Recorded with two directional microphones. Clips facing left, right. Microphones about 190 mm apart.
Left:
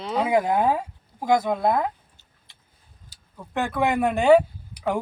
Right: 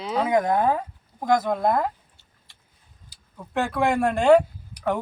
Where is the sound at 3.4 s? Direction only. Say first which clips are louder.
Even; centre (ahead or behind).